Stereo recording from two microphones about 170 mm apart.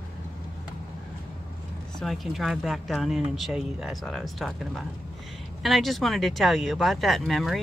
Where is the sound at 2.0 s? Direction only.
Centre (ahead or behind).